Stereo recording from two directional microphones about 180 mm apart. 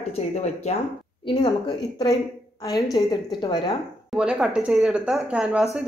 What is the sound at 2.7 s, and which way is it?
A woman's voice, 20° left (ahead or behind).